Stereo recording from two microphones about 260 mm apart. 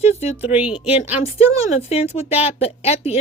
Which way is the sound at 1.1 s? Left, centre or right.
Left.